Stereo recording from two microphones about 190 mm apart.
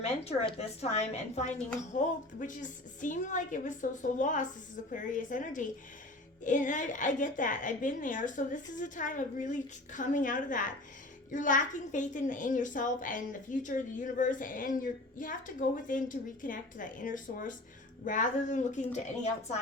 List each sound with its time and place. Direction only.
0.0 s a woman's voice: 35° left (ahead or behind)